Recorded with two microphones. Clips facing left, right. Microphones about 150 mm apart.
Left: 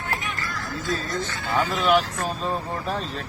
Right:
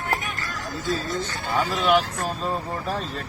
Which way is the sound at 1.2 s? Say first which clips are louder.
Even; 40° right (ahead or behind).